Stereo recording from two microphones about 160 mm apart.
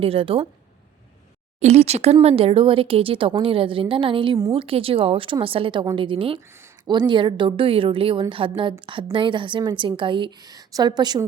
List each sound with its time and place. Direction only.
0.0 s a woman's voice: 35° right (ahead or behind)
1.5 s a woman's voice: 40° right (ahead or behind); by 11.3 s 25° right (ahead or behind)